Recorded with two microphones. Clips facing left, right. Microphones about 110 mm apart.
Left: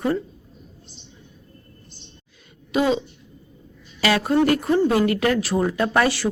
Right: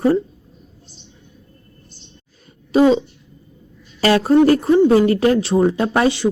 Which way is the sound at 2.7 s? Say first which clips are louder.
Right 7 dB; 35° right (ahead or behind).